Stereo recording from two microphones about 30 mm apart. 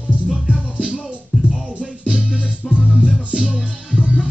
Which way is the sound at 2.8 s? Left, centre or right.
Right.